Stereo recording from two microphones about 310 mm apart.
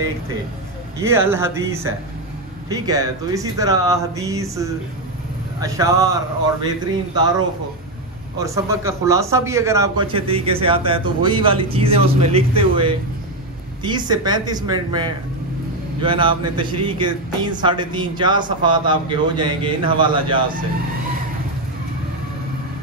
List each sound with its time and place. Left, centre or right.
0.9 s speech: centre
8.4 s speech: centre